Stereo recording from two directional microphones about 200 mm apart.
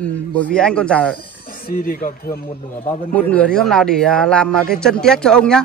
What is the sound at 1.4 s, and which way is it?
Speech, 45° left (ahead or behind).